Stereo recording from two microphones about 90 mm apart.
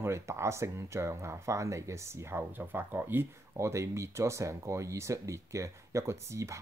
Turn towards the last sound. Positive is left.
turn(degrees=-35)  # may be behind; listen again after turning